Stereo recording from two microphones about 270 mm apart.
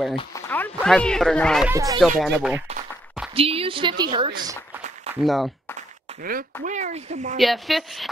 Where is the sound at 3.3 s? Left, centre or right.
Right.